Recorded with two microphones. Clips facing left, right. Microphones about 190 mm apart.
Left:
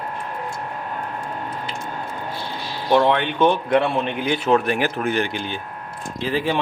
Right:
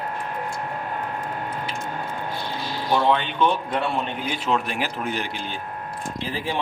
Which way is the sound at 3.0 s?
60° left (ahead or behind).